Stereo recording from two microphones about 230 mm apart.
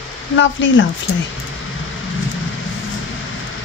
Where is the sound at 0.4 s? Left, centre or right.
Left.